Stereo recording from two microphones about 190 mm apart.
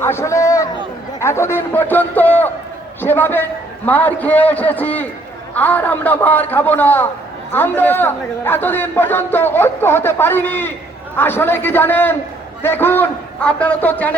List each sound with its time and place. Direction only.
0.0 s a man's voice: 15° left (ahead or behind)